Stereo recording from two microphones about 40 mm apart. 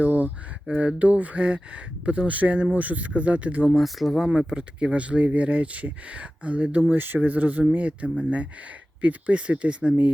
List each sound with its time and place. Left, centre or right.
0.0 s a sound: right
0.7 s speech: right
3.8 s speech: centre
4.3 s speech: right
6.9 s speech: right